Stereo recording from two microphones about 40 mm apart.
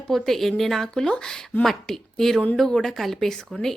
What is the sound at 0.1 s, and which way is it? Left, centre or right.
A woman's voice, centre.